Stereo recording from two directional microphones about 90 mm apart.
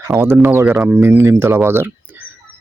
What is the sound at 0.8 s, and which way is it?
Speech, 20° right (ahead or behind).